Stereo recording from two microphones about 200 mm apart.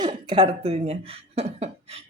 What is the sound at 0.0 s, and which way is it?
Speech, 25° right (ahead or behind).